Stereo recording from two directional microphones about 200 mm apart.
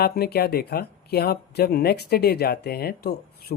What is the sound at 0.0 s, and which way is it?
Speech, 50° left (ahead or behind).